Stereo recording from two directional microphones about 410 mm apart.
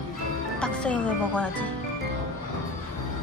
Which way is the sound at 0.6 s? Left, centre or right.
Centre.